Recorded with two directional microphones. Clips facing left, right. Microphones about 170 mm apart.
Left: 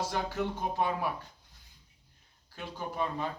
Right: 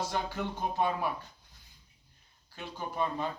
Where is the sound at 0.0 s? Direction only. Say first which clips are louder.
Left 1 dB; 5° left (ahead or behind).